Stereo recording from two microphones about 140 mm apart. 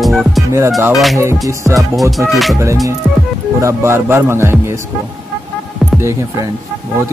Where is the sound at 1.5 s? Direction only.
25° right (ahead or behind).